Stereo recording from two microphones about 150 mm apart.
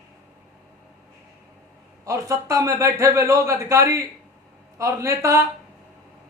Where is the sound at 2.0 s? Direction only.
20° right (ahead or behind).